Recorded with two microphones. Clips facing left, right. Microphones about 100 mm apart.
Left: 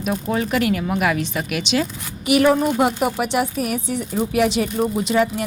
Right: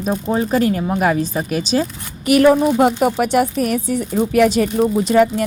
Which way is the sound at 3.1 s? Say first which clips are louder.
Right 5 dB; 45° right (ahead or behind).